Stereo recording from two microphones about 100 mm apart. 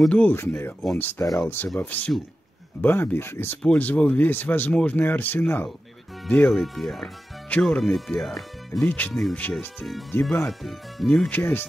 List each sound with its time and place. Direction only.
0.1 s speech: 15° left (ahead or behind)
6.5 s speech: centre (ahead or behind)
8.8 s speech: 15° left (ahead or behind)
9.1 s speech: 5° left (ahead or behind)
9.4 s speech: 15° left (ahead or behind)
10.2 s speech: centre (ahead or behind); by 11.6 s 20° left (ahead or behind)